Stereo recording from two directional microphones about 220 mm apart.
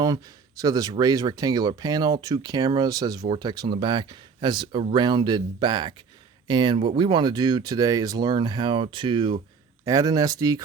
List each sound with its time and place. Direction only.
0.6 s speech: 15° right (ahead or behind)